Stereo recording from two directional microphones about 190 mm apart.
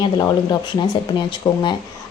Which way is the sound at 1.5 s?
20° left (ahead or behind).